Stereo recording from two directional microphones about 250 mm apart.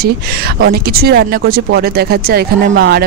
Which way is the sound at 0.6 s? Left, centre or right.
Right.